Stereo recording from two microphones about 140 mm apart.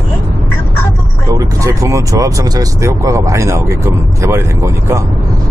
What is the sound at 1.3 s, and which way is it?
Speech, 25° right (ahead or behind).